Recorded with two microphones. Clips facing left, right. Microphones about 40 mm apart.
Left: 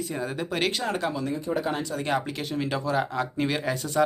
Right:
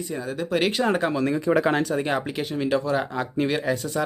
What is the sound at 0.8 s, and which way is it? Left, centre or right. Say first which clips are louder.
Speech: right 5 dB; right.